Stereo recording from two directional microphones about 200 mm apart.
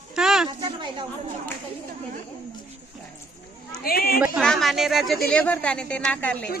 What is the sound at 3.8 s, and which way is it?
Speech, 50° left (ahead or behind).